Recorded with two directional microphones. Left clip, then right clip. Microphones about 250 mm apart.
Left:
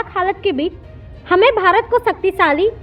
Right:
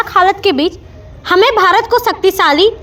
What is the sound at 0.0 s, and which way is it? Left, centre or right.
A woman's voice, centre.